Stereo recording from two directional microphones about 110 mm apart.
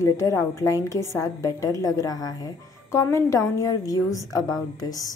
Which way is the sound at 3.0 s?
25° left (ahead or behind).